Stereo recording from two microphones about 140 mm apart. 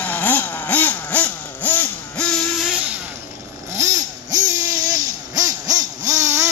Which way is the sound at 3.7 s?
20° right (ahead or behind).